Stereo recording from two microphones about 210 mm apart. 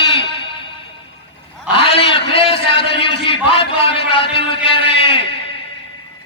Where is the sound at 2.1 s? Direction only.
25° left (ahead or behind).